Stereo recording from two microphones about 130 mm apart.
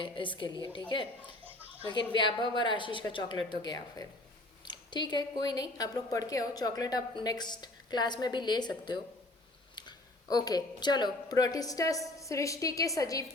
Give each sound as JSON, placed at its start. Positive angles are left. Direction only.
{"t": 0.0, "sound": "a woman's voice", "side_deg": 40}
{"t": 2.1, "sound": "a woman's voice", "side_deg": 35}
{"t": 9.7, "sound": "a woman's voice", "side_deg": 30}